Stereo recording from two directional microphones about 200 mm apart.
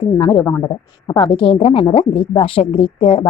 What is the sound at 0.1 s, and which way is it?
A woman's voice, 20° left (ahead or behind).